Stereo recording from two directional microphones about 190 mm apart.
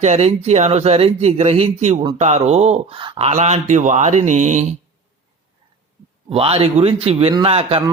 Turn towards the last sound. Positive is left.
turn(degrees=-30)  # may be behind; listen again after turning